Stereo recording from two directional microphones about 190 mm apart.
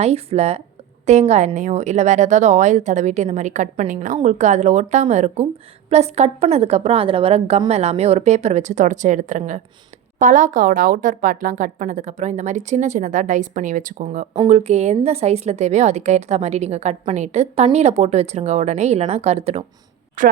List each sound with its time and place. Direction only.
0.0 s a woman's voice: 35° right (ahead or behind)
20.2 s a woman's voice: 45° right (ahead or behind)